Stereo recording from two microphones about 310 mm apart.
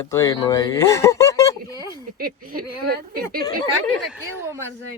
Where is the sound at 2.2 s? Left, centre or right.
Right.